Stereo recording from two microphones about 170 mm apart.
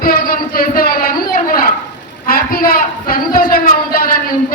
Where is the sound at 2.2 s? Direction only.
60° left (ahead or behind).